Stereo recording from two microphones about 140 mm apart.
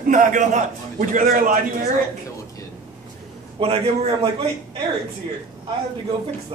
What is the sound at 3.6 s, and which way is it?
Speech, 45° right (ahead or behind).